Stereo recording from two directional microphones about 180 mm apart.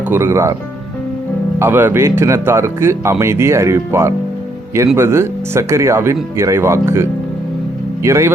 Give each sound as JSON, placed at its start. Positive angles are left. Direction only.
{"t": 0.1, "sound": "speech", "side_deg": -15}
{"t": 1.5, "sound": "speech", "side_deg": -10}